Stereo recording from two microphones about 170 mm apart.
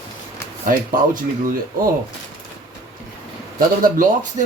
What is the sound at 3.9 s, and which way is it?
Speech, 50° right (ahead or behind).